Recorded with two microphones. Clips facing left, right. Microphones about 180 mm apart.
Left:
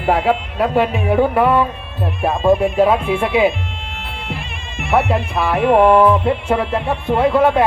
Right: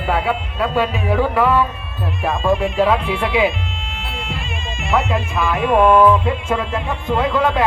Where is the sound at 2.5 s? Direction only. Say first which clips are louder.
Left 2 dB; 50° left (ahead or behind).